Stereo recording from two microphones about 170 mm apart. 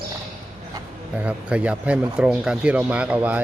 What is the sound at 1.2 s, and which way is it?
Speech, 5° right (ahead or behind).